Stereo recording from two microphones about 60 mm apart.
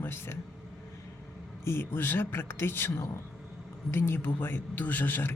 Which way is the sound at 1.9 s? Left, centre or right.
Left.